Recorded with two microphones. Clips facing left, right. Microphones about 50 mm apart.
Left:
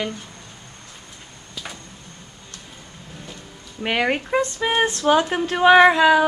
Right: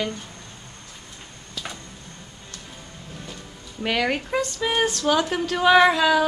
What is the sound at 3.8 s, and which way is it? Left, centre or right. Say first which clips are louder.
Speech: left 2 dB; left.